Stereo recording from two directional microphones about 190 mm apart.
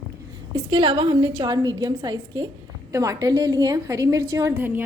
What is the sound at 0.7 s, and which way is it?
A woman's voice, 25° right (ahead or behind).